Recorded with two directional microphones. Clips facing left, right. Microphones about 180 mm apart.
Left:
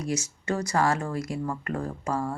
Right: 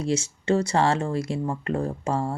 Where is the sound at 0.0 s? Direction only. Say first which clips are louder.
Right 4 dB; 30° right (ahead or behind).